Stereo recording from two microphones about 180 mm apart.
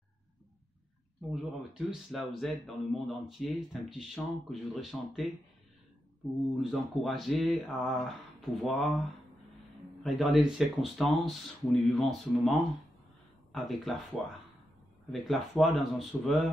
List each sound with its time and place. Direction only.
1.3 s speech: 5° right (ahead or behind)
6.5 s speech: centre (ahead or behind)
10.0 s speech: centre (ahead or behind)
15.0 s speech: centre (ahead or behind)